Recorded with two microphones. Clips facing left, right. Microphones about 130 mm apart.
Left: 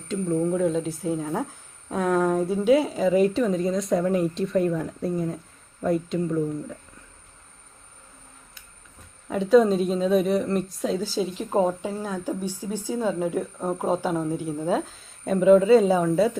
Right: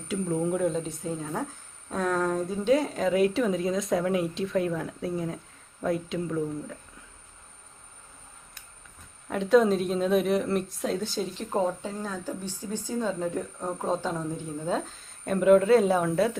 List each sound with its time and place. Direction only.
0.1 s a woman's voice: 10° right (ahead or behind)
9.3 s a woman's voice: centre (ahead or behind)
15.3 s a woman's voice: centre (ahead or behind)